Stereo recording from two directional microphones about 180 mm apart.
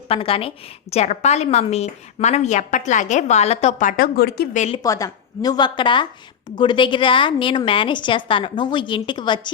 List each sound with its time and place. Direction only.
0.1 s a woman's voice: 30° left (ahead or behind); by 4.4 s 60° left (ahead or behind)
4.5 s a woman's voice: 40° left (ahead or behind)
4.8 s a woman's voice: 20° left (ahead or behind)